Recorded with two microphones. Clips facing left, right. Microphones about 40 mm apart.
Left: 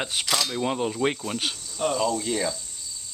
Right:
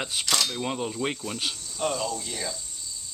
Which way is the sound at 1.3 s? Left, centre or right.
Left.